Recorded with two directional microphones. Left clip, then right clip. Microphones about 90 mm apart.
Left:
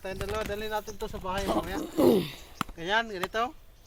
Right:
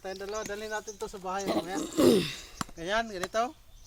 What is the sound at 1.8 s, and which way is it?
Speech, 5° right (ahead or behind).